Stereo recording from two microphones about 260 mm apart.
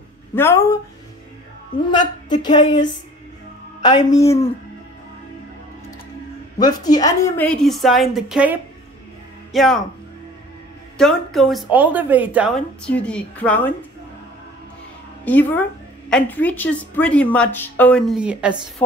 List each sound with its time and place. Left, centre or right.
0.3 s a man's voice: centre
3.8 s a man's voice: centre
6.6 s speech: centre
11.0 s speech: centre
15.2 s a man's voice: centre
18.8 s a man's voice: centre